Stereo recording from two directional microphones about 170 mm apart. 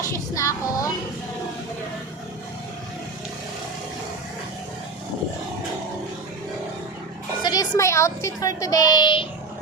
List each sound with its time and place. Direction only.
0.0 s speech: 15° left (ahead or behind)
7.4 s a woman's voice: 20° left (ahead or behind)